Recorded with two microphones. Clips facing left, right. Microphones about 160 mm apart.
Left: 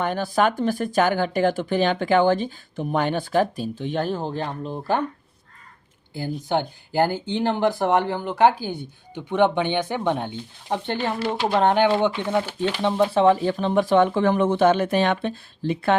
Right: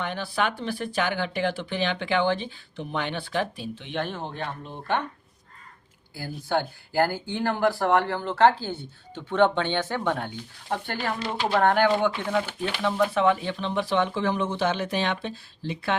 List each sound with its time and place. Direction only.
0.0 s speech: 45° left (ahead or behind)
6.1 s speech: 20° left (ahead or behind); by 16.0 s 50° left (ahead or behind)